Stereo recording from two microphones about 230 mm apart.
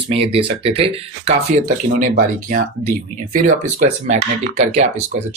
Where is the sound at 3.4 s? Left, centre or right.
Right.